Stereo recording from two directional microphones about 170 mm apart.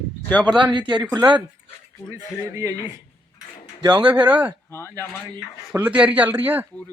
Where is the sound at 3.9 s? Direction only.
10° right (ahead or behind).